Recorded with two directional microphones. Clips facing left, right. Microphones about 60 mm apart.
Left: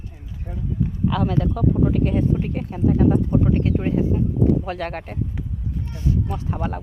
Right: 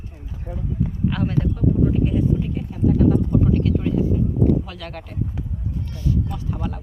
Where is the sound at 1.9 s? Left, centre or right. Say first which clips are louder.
Even; left.